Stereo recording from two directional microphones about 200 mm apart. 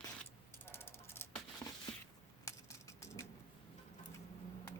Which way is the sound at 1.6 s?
15° left (ahead or behind).